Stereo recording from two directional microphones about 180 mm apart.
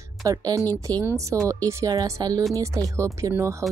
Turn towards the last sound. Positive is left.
turn(degrees=-15)  # may be behind; listen again after turning